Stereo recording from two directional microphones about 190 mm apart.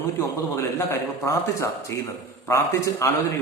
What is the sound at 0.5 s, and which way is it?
A man's voice, 15° left (ahead or behind).